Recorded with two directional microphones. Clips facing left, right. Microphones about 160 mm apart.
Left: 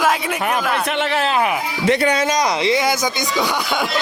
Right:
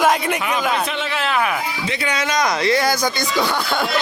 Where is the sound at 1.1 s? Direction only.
30° left (ahead or behind).